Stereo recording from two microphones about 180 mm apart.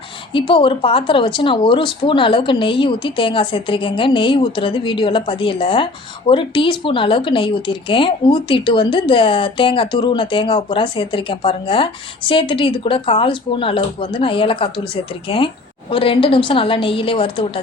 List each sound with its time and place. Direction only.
0.3 s speech: 30° left (ahead or behind)